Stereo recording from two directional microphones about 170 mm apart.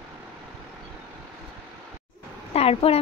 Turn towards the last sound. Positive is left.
turn(degrees=35)  # may be behind; listen again after turning